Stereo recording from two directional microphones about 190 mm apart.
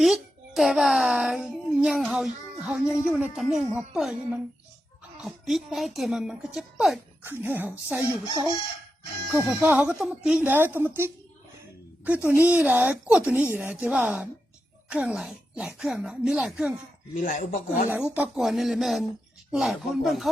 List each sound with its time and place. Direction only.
0.0 s a child's voice: centre (ahead or behind)
9.3 s a woman's voice: 5° right (ahead or behind)
17.2 s speech: 45° left (ahead or behind)
17.8 s speech: 10° right (ahead or behind)